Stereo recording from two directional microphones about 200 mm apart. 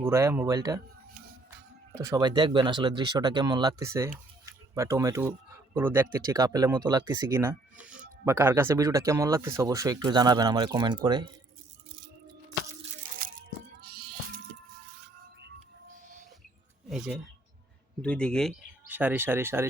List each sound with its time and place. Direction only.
0.0 s speech: 15° right (ahead or behind)
2.0 s speech: 20° right (ahead or behind)
13.8 s music: 50° right (ahead or behind)
18.0 s speech: 5° left (ahead or behind)
18.9 s speech: 10° right (ahead or behind)